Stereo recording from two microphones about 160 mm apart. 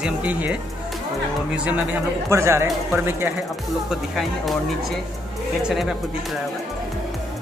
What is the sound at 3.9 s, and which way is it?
Speech, centre (ahead or behind).